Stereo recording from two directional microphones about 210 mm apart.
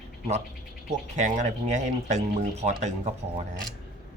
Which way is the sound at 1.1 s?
35° right (ahead or behind).